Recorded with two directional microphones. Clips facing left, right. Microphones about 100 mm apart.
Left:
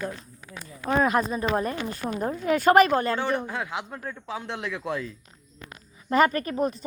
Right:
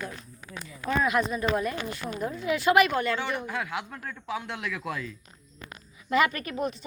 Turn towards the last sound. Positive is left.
turn(degrees=40)  # may be behind; listen again after turning